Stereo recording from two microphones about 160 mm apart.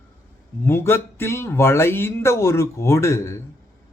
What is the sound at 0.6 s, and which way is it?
Speech, 15° left (ahead or behind).